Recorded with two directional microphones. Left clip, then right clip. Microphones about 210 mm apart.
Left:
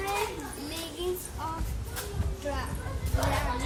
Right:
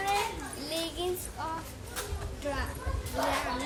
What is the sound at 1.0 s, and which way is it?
Child singing, 30° right (ahead or behind).